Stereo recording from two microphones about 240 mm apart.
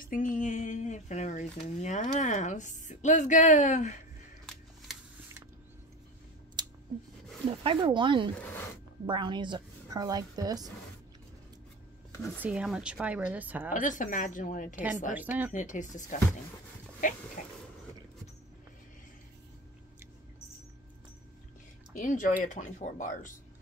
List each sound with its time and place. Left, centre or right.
0.0 s a sound: left
1.8 s a woman's voice: left
6.6 s a sound: centre
7.4 s speech: right
8.4 s a sound: centre
9.0 s a woman's voice: centre
12.4 s a woman's voice: centre
13.7 s a woman's voice: left
15.1 s a woman's voice: centre
15.5 s a woman's voice: left
17.4 s a woman's voice: left
21.9 s a woman's voice: left